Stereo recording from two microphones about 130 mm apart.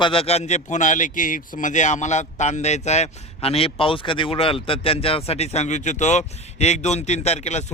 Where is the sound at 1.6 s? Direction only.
70° left (ahead or behind).